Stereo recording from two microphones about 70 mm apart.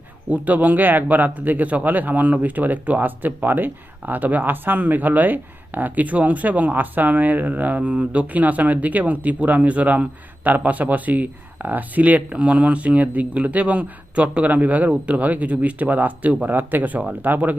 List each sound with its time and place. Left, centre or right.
0.3 s speech: right